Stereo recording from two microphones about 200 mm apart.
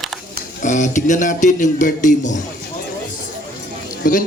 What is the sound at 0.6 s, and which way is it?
Speech, 40° left (ahead or behind).